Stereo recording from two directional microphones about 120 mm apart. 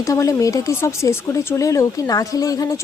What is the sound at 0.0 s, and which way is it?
Speech, 25° left (ahead or behind).